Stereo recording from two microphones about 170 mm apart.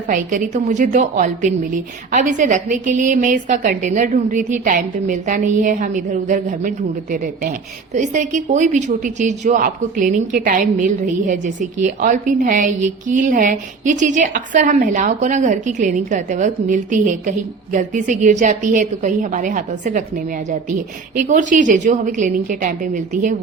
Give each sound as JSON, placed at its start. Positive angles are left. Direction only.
{"t": 0.1, "sound": "a woman's voice", "side_deg": -50}